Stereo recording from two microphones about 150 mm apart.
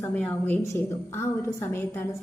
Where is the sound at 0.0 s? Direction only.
10° left (ahead or behind).